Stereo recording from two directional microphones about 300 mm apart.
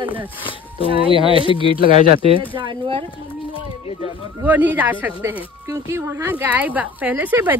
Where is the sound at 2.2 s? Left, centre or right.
Centre.